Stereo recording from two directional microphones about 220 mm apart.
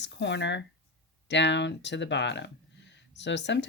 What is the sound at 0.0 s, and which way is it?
Speech, 50° left (ahead or behind).